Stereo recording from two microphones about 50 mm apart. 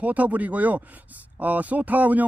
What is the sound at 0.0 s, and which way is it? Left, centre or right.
Speech, right.